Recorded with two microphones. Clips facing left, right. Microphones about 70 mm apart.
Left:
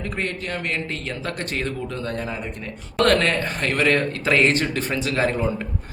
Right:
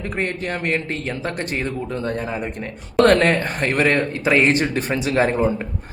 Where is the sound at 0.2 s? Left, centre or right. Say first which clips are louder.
Right 4 dB; right.